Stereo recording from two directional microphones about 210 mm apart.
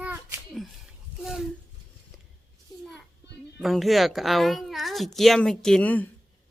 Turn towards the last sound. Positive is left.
turn(degrees=5)  # may be behind; listen again after turning